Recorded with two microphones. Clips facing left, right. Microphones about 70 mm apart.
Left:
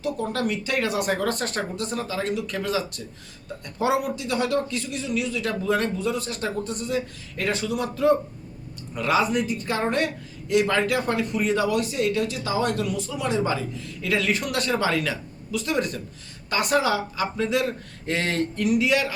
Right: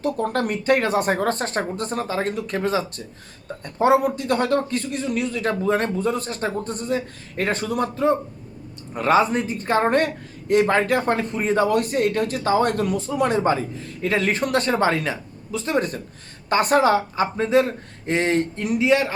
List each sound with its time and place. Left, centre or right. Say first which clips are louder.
0.0 s speech: right 3 dB; right
9.0 s speech: right 4 dB; right